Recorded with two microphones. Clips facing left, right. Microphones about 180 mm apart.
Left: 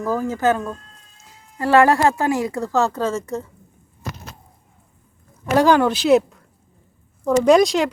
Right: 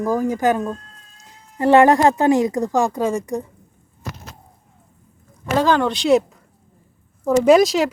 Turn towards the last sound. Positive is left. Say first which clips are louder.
# right 1 dB
turn(degrees=0)  # may be behind; listen again after turning